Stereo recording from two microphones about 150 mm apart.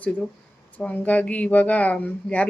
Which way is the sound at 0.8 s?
10° left (ahead or behind).